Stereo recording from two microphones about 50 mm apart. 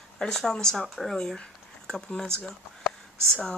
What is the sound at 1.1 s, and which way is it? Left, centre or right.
Speech, centre.